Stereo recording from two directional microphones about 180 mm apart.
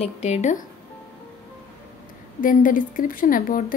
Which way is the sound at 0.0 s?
35° left (ahead or behind).